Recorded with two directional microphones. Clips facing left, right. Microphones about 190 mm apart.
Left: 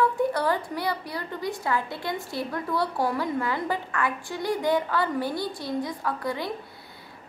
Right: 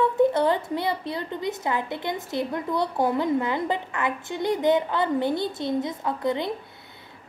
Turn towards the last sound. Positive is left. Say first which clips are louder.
# right 4 dB
turn(degrees=-20)  # may be behind; listen again after turning